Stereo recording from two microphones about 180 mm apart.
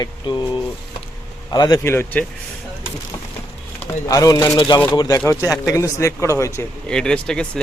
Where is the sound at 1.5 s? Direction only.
20° left (ahead or behind).